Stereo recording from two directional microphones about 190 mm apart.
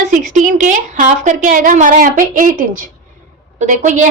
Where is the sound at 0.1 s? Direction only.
40° right (ahead or behind).